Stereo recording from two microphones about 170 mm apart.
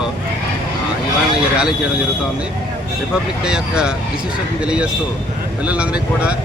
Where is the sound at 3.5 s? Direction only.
5° right (ahead or behind).